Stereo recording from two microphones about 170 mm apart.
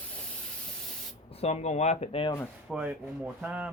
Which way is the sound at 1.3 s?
40° left (ahead or behind).